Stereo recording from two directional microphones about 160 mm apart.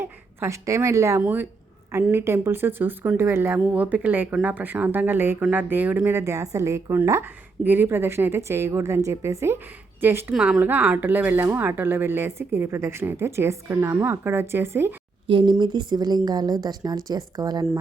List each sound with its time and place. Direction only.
0.0 s speech: 15° right (ahead or behind)
15.3 s a woman's voice: 30° right (ahead or behind)